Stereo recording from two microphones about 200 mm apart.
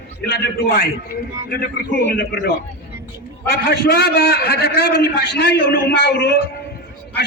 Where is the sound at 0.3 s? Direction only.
50° left (ahead or behind).